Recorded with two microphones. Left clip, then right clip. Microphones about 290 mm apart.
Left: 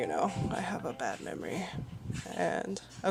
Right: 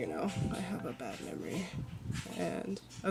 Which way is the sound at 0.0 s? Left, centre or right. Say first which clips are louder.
Left 6 dB; left.